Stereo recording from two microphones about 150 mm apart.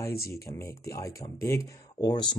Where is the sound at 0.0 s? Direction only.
90° left.